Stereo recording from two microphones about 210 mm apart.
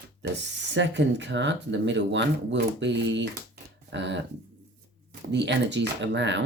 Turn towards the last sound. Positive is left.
turn(degrees=-60)  # may be behind; listen again after turning